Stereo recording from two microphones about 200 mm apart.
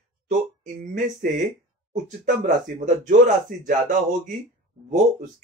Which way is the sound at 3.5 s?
40° right (ahead or behind).